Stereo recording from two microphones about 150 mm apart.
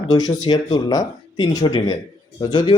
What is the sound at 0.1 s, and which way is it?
A man's voice, 25° left (ahead or behind).